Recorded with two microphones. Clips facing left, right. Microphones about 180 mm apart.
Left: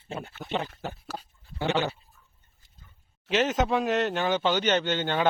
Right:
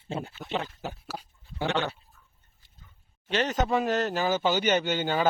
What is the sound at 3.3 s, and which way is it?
A man's voice, centre (ahead or behind).